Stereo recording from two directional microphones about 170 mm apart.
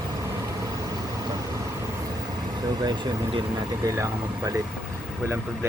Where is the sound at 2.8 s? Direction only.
25° right (ahead or behind).